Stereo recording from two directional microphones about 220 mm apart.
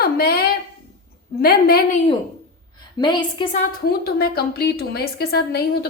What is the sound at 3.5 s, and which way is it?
A woman's voice, 40° left (ahead or behind).